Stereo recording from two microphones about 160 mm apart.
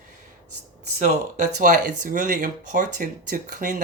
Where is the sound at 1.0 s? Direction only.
50° right (ahead or behind).